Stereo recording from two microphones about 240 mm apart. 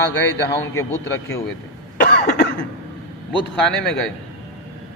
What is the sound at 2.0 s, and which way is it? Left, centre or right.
Cough, left.